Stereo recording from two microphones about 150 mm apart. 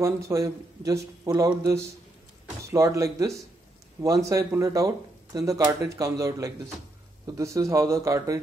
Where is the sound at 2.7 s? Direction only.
20° right (ahead or behind).